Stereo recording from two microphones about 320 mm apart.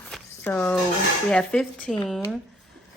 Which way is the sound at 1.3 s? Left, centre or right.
Centre.